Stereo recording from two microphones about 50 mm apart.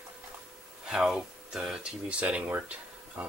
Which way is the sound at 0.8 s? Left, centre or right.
Centre.